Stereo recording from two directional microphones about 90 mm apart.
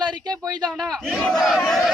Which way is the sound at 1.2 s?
Centre (ahead or behind).